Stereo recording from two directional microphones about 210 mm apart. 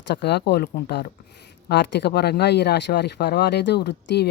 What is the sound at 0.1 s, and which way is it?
Speech, 55° left (ahead or behind).